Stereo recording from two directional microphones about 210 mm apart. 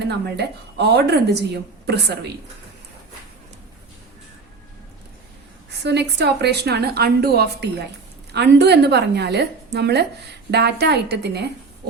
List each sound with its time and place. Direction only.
0.0 s speech: 50° right (ahead or behind)
5.8 s speech: 55° right (ahead or behind)